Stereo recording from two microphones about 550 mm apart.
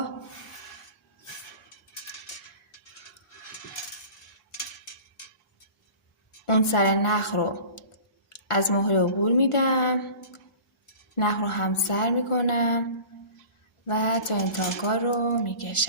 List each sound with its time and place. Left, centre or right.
6.4 s speech: left
11.1 s speech: left
13.8 s speech: left